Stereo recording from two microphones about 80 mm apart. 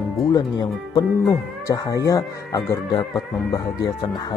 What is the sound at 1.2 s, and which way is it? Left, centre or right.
Speech, left.